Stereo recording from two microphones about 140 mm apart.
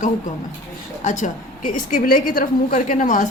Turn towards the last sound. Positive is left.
turn(degrees=65)  # may be behind; listen again after turning